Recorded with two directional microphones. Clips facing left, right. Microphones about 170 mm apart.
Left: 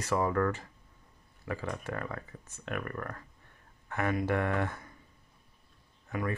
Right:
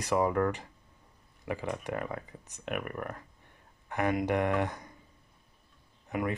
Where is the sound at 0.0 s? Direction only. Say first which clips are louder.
Right 2 dB; 15° right (ahead or behind).